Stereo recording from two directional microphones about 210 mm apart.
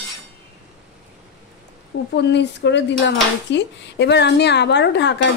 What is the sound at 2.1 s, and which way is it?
Speech, 55° left (ahead or behind).